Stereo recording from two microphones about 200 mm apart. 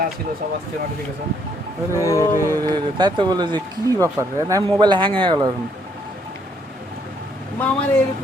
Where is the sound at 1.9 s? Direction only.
15° left (ahead or behind).